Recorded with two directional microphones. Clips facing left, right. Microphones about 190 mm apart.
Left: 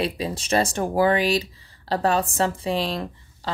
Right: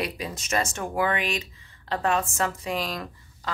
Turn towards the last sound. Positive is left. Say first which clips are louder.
# left 5 dB
turn(degrees=30)  # may be behind; listen again after turning